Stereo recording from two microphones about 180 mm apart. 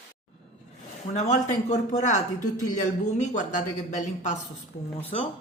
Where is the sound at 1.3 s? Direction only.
40° left (ahead or behind).